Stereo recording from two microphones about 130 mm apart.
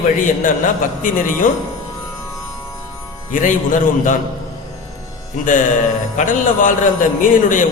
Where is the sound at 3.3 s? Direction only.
85° left.